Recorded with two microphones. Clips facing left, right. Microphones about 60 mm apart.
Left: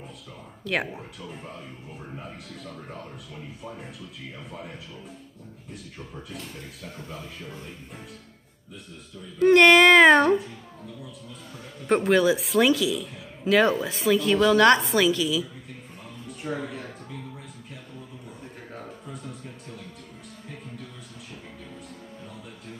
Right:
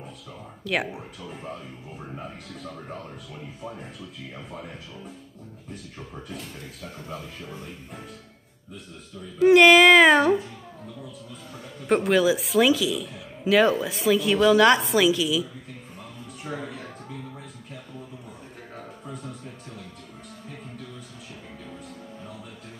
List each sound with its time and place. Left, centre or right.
9.4 s a woman's voice: centre
11.9 s a woman's voice: centre
16.4 s a woman's voice: centre